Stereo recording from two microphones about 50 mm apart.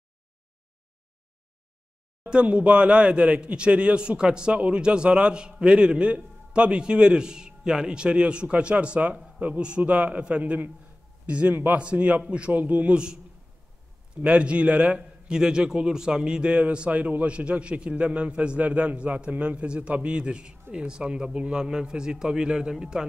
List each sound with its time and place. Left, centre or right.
2.2 s a man's voice: right